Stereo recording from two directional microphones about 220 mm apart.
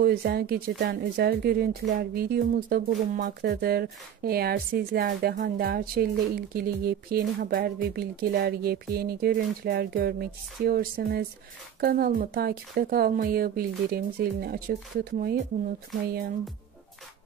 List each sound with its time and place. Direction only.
0.0 s speech: 45° right (ahead or behind)